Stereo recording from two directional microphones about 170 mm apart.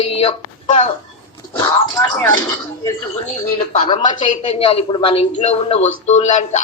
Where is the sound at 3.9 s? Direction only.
30° left (ahead or behind).